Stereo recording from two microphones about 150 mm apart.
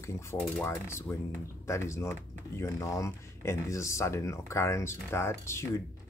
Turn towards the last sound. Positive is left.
turn(degrees=15)  # may be behind; listen again after turning